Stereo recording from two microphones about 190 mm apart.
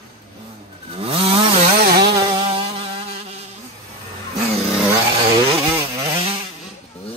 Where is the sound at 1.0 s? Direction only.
30° right (ahead or behind).